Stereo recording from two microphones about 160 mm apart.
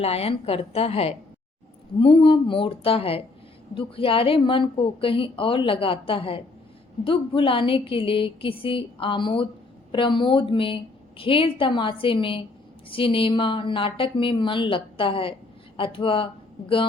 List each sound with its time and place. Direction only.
0.0 s a woman's voice: 40° left (ahead or behind)